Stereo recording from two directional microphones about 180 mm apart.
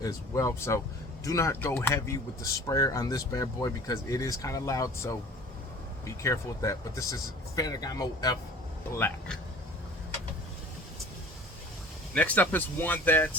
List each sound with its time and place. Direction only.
0.0 s speech: 15° left (ahead or behind)
12.1 s speech: 10° left (ahead or behind)